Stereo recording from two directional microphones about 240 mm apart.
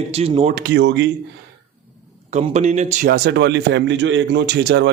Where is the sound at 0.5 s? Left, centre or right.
Right.